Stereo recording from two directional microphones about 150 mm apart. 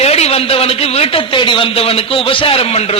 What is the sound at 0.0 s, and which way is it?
A man's voice, 45° left (ahead or behind).